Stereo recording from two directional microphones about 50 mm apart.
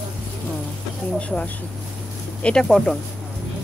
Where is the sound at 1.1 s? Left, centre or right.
Left.